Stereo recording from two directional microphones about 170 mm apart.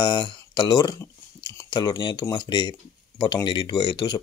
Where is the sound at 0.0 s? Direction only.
25° left (ahead or behind).